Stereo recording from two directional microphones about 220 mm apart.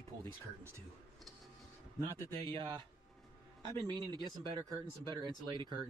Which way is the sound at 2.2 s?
20° right (ahead or behind).